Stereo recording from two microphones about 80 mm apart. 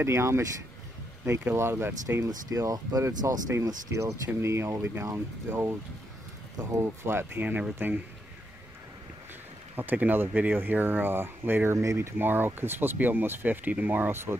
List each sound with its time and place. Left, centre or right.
0.0 s speech: right
2.2 s speech: right
3.3 s speech: right
9.8 s speech: right
12.2 s speech: right